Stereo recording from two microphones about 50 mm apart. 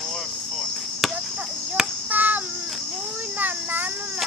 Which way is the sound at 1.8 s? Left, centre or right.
Centre.